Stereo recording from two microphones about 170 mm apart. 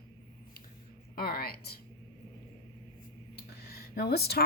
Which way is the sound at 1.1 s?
65° left (ahead or behind).